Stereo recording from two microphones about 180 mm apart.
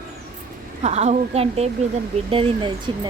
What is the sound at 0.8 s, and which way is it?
A woman's voice, 40° right (ahead or behind).